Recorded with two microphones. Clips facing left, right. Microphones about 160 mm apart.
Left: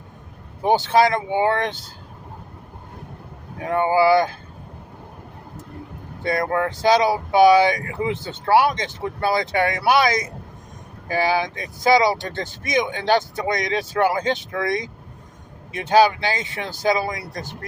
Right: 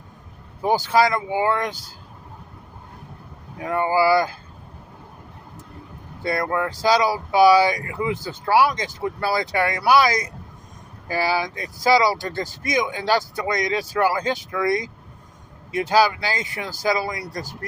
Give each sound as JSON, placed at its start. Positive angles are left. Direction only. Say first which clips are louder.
{"t": 0.6, "sound": "speech", "louder": "left 2 dB", "side_deg": 25}
{"t": 3.6, "sound": "speech", "louder": "left 2 dB", "side_deg": 25}
{"t": 6.7, "sound": "speech", "louder": "left 2 dB", "side_deg": 25}
{"t": 15.9, "sound": "speech", "louder": "left 4 dB", "side_deg": 20}